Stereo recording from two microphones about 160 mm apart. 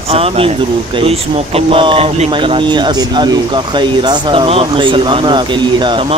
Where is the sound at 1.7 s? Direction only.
35° right (ahead or behind).